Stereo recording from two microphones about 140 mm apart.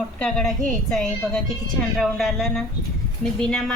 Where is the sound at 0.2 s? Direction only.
5° left (ahead or behind).